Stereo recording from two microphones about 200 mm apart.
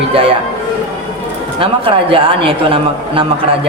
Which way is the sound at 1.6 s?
25° right (ahead or behind).